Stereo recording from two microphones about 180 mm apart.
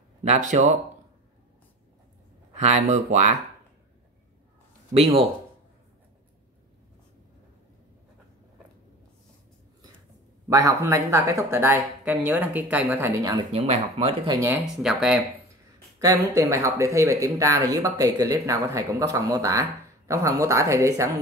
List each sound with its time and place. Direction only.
0.2 s speech: 40° right (ahead or behind)
2.5 s speech: 40° right (ahead or behind)
4.9 s speech: 30° right (ahead or behind)
10.5 s speech: 20° right (ahead or behind)
13.5 s speech: 35° right (ahead or behind)
14.3 s speech: 15° right (ahead or behind)
14.6 s speech: 5° right (ahead or behind)
16.3 s speech: 15° right (ahead or behind)